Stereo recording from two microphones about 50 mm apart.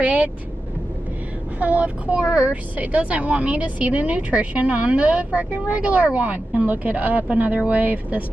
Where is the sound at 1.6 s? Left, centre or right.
Right.